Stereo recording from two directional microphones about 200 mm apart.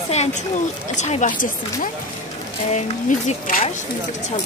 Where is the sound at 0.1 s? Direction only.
35° left (ahead or behind).